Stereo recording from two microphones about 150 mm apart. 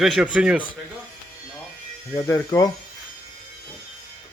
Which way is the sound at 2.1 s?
20° left (ahead or behind).